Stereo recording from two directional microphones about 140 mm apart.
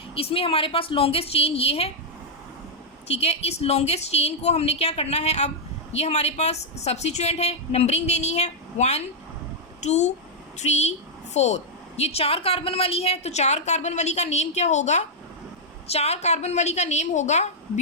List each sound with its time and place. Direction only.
0.1 s a woman's voice: 40° left (ahead or behind)
3.1 s a woman's voice: 45° left (ahead or behind)